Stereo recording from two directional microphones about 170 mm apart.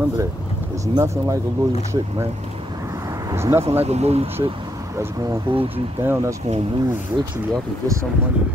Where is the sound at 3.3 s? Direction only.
15° right (ahead or behind).